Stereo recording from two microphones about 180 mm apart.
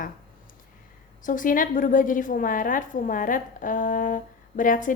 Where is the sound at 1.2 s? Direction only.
45° left (ahead or behind).